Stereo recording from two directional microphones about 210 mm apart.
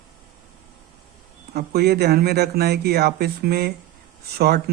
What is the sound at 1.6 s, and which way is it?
Speech, 50° right (ahead or behind).